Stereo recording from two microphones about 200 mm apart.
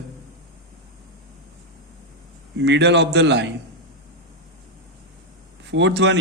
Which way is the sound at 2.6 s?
60° right (ahead or behind).